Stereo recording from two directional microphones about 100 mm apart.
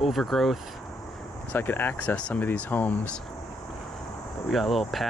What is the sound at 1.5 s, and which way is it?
Speech, 20° left (ahead or behind).